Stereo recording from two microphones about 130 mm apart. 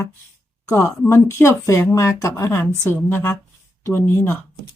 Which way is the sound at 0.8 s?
20° left (ahead or behind).